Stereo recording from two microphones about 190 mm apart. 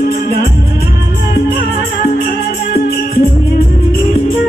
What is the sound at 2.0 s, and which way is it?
Music, 50° left (ahead or behind).